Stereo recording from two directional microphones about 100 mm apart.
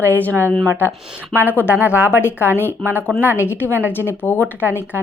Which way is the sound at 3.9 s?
20° left (ahead or behind).